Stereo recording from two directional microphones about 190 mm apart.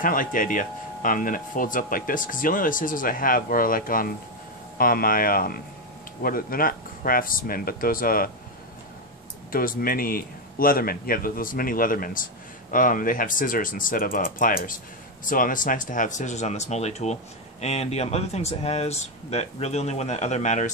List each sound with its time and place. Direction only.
0.0 s speech: 45° left (ahead or behind)
9.5 s speech: 50° left (ahead or behind)